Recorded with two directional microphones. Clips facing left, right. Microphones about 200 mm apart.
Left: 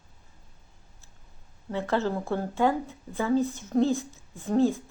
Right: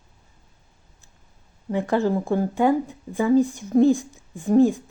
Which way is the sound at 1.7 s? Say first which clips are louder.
Right 6 dB; 15° right (ahead or behind).